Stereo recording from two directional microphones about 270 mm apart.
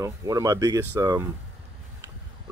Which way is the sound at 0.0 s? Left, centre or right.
Centre.